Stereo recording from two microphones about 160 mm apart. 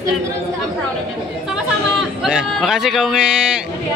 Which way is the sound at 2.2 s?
5° right (ahead or behind).